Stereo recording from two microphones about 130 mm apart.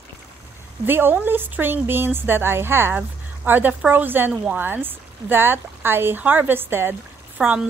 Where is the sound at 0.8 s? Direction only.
15° right (ahead or behind).